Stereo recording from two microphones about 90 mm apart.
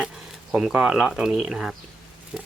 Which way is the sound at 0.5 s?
5° right (ahead or behind).